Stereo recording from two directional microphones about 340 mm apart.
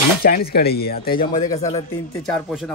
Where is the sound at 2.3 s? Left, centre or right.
Centre.